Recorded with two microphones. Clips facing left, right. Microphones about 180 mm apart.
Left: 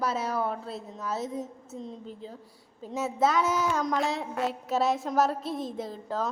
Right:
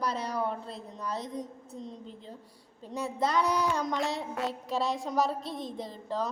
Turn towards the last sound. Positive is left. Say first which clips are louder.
# left 2 dB
turn(degrees=5)  # may be behind; listen again after turning